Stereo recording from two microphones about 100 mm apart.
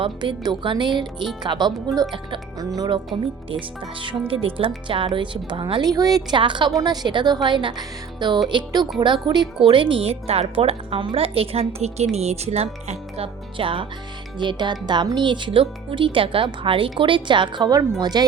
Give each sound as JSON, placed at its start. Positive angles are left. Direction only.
{"t": 0.0, "sound": "a woman's voice", "side_deg": -50}
{"t": 3.1, "sound": "speech", "side_deg": -60}
{"t": 5.8, "sound": "a woman's voice", "side_deg": -40}
{"t": 6.3, "sound": "speech", "side_deg": -55}
{"t": 6.7, "sound": "speech", "side_deg": -45}
{"t": 9.6, "sound": "speech", "side_deg": -60}
{"t": 10.5, "sound": "a woman's voice", "side_deg": -70}
{"t": 14.3, "sound": "speech", "side_deg": -50}